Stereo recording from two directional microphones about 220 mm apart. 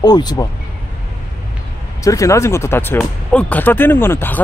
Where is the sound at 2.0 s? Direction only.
15° left (ahead or behind).